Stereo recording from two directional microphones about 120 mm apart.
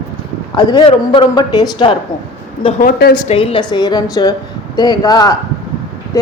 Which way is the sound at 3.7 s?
35° left (ahead or behind).